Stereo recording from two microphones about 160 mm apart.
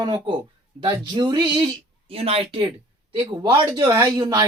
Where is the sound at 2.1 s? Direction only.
40° right (ahead or behind).